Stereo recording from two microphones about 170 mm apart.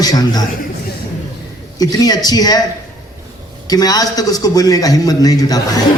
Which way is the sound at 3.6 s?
20° left (ahead or behind).